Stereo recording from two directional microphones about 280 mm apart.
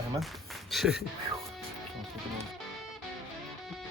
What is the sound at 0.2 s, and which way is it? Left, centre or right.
Speech, centre.